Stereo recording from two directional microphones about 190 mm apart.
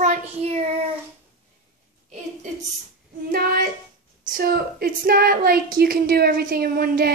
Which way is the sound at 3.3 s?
50° right (ahead or behind).